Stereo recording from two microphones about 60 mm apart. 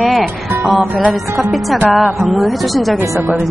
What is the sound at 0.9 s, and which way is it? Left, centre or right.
Speech, centre.